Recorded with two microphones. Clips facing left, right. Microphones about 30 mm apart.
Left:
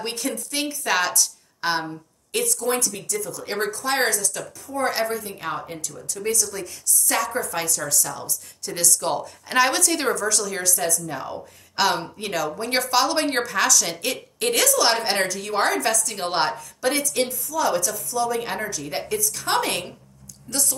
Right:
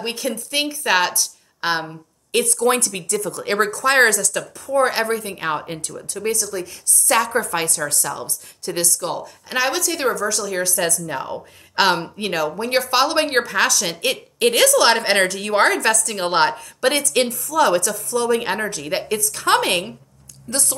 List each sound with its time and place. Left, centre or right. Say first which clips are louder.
0.0 s a woman's voice: right 3 dB; centre
2.3 s a woman's voice: right 6 dB; right
2.7 s a woman's voice: right 4 dB; right
3.5 s speech: right 7 dB; right
4.6 s a woman's voice: right 5 dB; right
5.9 s a woman's voice: right 2 dB; right
6.4 s a woman's voice: right 4 dB; centre
7.1 s a woman's voice: right 6 dB; right
8.9 s a woman's voice: left 1 dB; centre
10.8 s a woman's voice: right 4 dB; right
12.4 s a woman's voice: right 4 dB; centre
12.9 s a woman's voice: right 3 dB; right
14.8 s a woman's voice: right 5 dB; right
17.1 s a woman's voice: right 5 dB; right